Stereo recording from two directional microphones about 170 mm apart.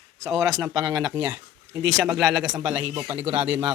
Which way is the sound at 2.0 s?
5° right (ahead or behind).